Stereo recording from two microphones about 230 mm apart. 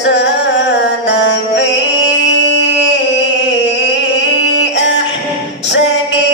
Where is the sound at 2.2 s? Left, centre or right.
Left.